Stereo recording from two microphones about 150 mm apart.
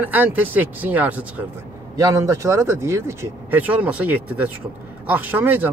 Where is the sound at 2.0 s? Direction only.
20° right (ahead or behind).